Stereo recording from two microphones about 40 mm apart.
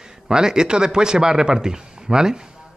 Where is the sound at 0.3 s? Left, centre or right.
Centre.